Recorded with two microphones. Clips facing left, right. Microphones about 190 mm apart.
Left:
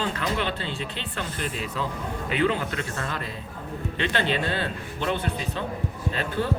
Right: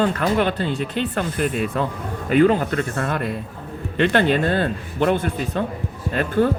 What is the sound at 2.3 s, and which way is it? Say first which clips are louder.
Speech: right 9 dB; 45° right (ahead or behind).